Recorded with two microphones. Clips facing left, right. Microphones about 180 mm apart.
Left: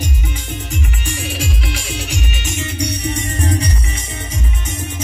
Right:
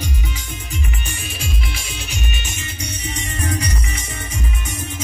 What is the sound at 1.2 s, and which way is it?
Music, 85° left.